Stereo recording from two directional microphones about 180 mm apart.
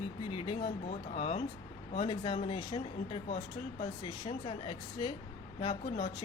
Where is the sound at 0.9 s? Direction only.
40° left (ahead or behind).